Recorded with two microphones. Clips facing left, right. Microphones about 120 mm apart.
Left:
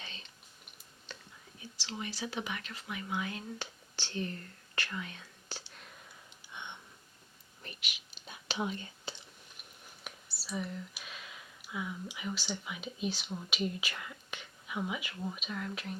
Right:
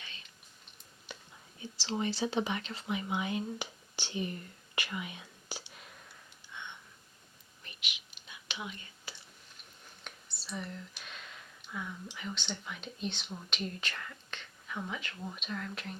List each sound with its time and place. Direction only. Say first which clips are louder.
0.0 s a sound: left 3 dB; 30° left (ahead or behind)
1.1 s whispering: right 1 dB; 10° right (ahead or behind)
1.7 s speech: right 7 dB; 30° right (ahead or behind); by 5.8 s 10° right (ahead or behind)
6.5 s a sound: left 1 dB; 20° left (ahead or behind)
7.6 s whispering: left 1 dB; 40° left (ahead or behind)
10.0 s speech: left 1 dB; 5° left (ahead or behind)